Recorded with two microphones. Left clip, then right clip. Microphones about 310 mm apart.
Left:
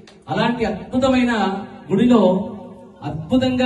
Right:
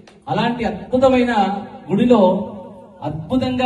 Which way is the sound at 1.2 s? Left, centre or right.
Centre.